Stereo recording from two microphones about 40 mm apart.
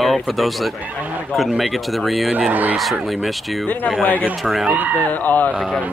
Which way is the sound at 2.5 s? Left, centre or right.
Right.